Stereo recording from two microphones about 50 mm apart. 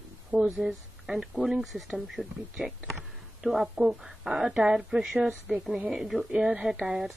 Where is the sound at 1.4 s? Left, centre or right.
Centre.